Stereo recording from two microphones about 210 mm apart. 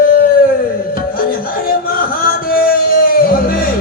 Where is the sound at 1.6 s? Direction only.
45° left (ahead or behind).